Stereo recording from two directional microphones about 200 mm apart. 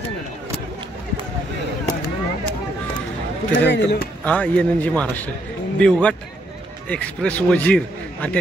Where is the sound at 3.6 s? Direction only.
60° left (ahead or behind).